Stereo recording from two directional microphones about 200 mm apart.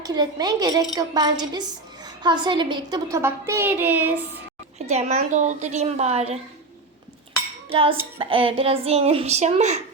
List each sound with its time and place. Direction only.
0.0 s a child's voice: 20° right (ahead or behind)
4.9 s a woman's voice: 35° right (ahead or behind)
7.7 s a child's voice: 25° right (ahead or behind)